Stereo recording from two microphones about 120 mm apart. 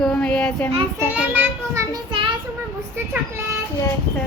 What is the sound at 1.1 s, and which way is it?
Speech, 15° right (ahead or behind).